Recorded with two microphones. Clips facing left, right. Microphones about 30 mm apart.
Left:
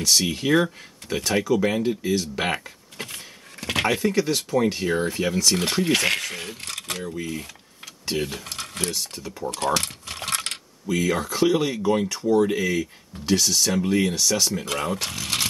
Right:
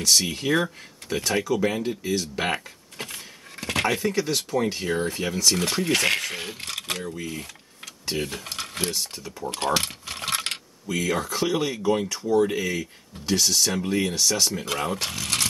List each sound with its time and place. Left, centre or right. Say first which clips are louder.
0.0 s speech: left 1 dB; centre
9.7 s keys jangling: even; centre
10.9 s speech: left 2 dB; centre